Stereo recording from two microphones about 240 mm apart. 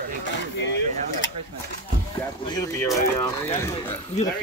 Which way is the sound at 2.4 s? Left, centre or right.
Centre.